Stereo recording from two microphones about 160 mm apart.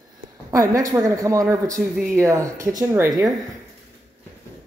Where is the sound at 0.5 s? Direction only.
20° right (ahead or behind).